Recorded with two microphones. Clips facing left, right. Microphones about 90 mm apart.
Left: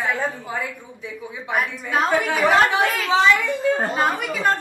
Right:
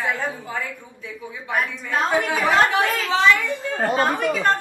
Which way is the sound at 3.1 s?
20° left (ahead or behind).